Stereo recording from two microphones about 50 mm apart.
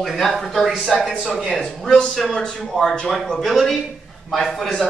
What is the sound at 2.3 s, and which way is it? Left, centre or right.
Speech, centre.